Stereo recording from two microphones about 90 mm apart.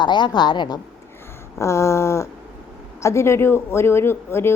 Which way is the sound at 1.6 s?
30° left (ahead or behind).